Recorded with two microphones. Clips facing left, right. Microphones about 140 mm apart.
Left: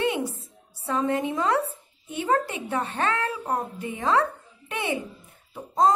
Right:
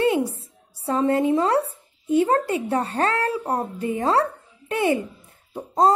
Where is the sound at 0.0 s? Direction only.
35° right (ahead or behind).